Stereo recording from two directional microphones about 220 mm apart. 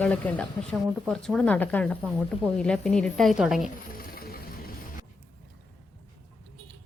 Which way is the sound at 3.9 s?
40° left (ahead or behind).